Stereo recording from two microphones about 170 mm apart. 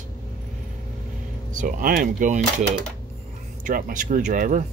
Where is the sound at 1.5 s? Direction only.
50° right (ahead or behind).